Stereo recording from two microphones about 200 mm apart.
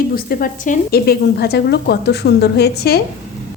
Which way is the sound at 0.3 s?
45° left (ahead or behind).